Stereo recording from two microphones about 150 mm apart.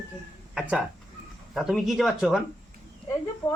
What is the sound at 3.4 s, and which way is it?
Speech, 20° left (ahead or behind).